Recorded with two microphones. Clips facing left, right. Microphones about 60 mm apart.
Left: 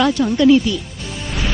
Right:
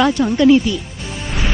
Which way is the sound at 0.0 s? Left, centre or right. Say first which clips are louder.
Right 1 dB; right.